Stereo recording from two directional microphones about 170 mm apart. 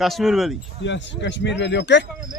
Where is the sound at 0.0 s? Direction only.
Centre (ahead or behind).